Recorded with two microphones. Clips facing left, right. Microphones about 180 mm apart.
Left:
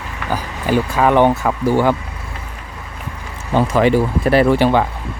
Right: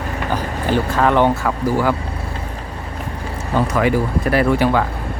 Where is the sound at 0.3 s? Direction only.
10° left (ahead or behind); by 2.0 s 25° left (ahead or behind).